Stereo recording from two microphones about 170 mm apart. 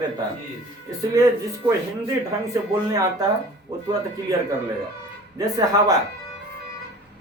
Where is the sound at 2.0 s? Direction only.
20° right (ahead or behind).